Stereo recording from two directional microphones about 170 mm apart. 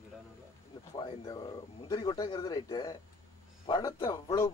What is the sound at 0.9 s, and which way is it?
Speech, 30° left (ahead or behind).